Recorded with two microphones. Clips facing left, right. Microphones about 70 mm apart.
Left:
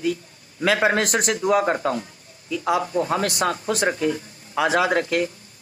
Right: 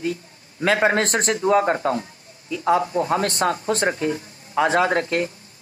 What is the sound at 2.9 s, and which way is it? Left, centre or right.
Speech, centre.